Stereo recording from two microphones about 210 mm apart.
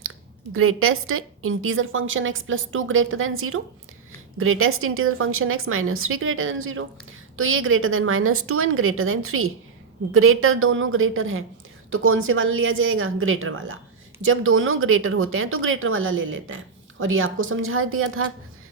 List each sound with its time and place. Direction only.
0.5 s a woman's voice: 90° right